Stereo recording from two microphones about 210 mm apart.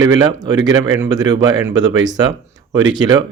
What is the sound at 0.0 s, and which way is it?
Speech, 20° right (ahead or behind).